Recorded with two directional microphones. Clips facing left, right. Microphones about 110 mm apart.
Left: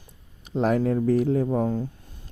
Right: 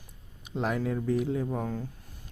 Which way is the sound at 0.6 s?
40° left (ahead or behind).